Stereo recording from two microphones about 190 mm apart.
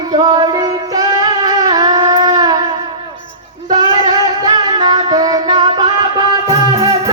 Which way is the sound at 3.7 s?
25° right (ahead or behind).